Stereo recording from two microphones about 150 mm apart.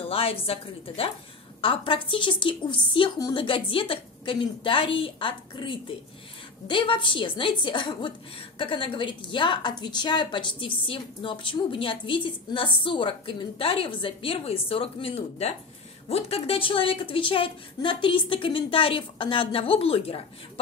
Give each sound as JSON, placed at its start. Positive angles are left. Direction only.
{"t": 0.1, "sound": "a woman's voice", "side_deg": 40}